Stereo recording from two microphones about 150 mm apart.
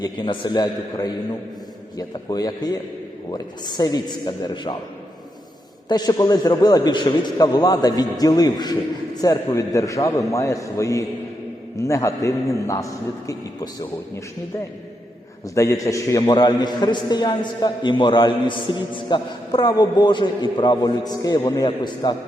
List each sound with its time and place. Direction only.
0.0 s a man's voice: 30° left (ahead or behind)
5.9 s a man's voice: 25° left (ahead or behind)
15.5 s a man's voice: 20° left (ahead or behind)